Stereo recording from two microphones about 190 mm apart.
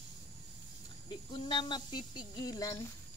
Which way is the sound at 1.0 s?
25° left (ahead or behind).